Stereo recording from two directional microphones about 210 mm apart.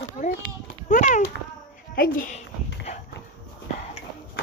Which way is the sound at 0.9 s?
35° left (ahead or behind).